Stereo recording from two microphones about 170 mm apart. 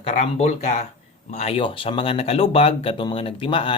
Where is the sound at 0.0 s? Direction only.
40° left (ahead or behind).